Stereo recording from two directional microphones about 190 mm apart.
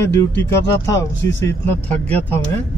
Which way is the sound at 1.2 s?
15° left (ahead or behind).